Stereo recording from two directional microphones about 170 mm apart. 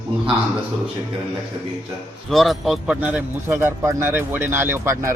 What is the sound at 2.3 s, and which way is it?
Speech, centre (ahead or behind).